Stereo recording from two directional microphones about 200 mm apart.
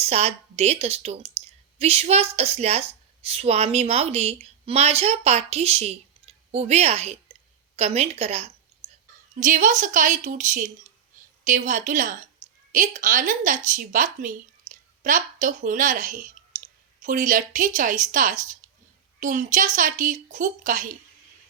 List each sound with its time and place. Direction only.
0.0 s a woman's voice: 30° right (ahead or behind)
8.8 s a sound: 30° right (ahead or behind)
9.4 s speech: 40° right (ahead or behind)